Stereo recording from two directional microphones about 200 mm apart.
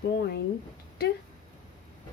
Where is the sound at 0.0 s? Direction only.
55° left (ahead or behind).